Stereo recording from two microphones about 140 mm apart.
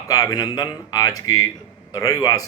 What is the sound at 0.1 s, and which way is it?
Speech, 25° left (ahead or behind).